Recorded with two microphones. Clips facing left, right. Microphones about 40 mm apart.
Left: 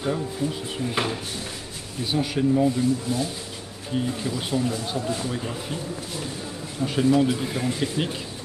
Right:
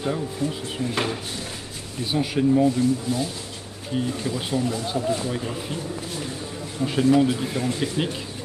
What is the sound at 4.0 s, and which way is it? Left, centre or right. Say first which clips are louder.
A man's voice: right 1 dB; centre.